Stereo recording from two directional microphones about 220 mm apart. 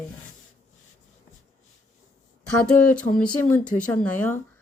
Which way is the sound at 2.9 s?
5° left (ahead or behind).